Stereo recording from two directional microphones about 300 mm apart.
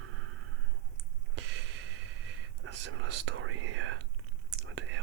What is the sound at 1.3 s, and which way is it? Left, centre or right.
Gasp, right.